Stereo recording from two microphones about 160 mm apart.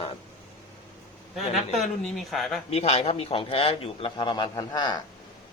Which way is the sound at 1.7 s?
Centre (ahead or behind).